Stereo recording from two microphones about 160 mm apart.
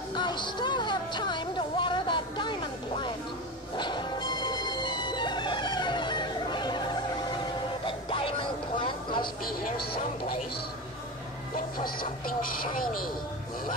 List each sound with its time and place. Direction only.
0.1 s music: 30° left (ahead or behind)
11.8 s speech: 65° left (ahead or behind)